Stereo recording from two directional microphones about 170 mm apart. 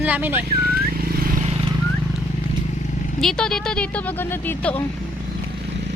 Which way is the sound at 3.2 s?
5° left (ahead or behind).